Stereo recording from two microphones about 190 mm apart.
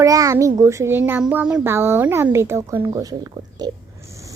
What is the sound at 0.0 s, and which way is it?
Speech, 15° right (ahead or behind).